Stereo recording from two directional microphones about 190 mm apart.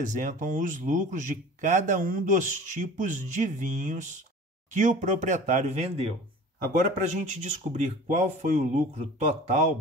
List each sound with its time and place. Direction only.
0.0 s a man's voice: 40° right (ahead or behind)